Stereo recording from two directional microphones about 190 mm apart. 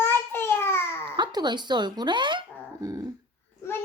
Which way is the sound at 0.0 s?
10° left (ahead or behind).